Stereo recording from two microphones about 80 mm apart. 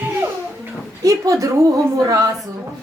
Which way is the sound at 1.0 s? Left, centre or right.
Right.